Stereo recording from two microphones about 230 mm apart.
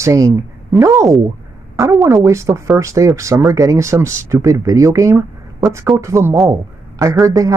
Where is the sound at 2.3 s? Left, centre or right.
Centre.